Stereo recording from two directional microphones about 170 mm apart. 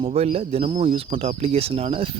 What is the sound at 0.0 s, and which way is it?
Speech, 35° right (ahead or behind).